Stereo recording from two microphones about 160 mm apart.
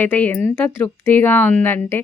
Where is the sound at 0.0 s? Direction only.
10° left (ahead or behind).